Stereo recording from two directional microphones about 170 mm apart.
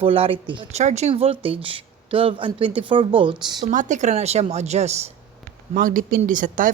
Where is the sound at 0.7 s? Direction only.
40° right (ahead or behind); by 3.6 s 25° right (ahead or behind).